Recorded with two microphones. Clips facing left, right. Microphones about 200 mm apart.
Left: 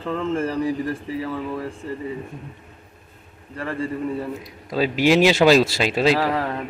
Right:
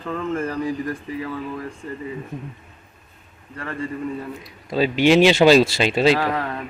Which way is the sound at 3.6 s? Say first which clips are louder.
Left 2 dB; 30° left (ahead or behind).